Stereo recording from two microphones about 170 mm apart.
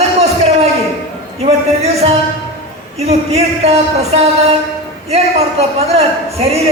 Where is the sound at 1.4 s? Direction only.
35° right (ahead or behind).